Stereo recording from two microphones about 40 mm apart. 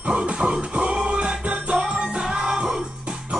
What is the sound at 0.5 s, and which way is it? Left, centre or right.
Music, right.